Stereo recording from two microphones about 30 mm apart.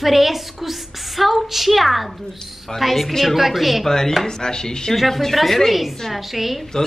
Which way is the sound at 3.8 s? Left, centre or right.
Centre.